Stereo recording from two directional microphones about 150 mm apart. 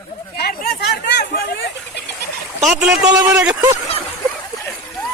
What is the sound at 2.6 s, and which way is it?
Speech, 5° right (ahead or behind).